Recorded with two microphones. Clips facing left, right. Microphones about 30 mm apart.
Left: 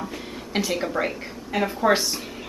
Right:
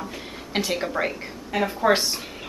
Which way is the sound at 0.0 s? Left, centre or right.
Centre.